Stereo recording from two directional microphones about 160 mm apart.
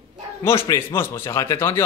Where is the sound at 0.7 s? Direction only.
15° left (ahead or behind).